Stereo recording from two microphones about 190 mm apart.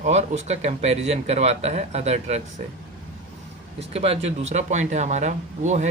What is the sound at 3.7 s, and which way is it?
Speech, 30° right (ahead or behind).